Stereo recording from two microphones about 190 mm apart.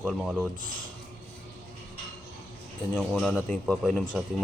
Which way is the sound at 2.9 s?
5° left (ahead or behind).